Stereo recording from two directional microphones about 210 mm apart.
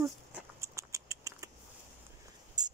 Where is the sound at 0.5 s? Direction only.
15° right (ahead or behind).